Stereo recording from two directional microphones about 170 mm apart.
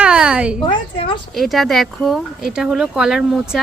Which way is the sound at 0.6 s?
30° left (ahead or behind).